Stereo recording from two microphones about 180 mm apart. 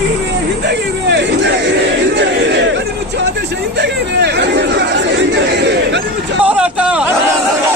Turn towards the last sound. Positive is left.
turn(degrees=-5)  # may be behind; listen again after turning